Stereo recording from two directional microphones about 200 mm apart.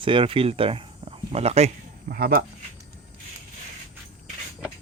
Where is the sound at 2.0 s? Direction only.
50° right (ahead or behind).